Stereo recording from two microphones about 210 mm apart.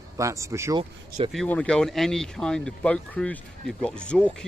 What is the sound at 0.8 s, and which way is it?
Speech, 25° right (ahead or behind).